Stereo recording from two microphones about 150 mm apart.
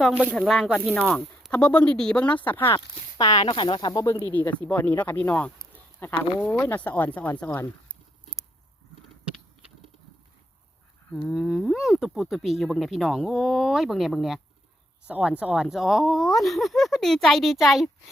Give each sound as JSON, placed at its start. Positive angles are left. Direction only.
{"t": 0.3, "sound": "speech", "side_deg": 0}
{"t": 2.7, "sound": "speech", "side_deg": 25}
{"t": 4.3, "sound": "speech", "side_deg": 10}
{"t": 11.3, "sound": "speech", "side_deg": 0}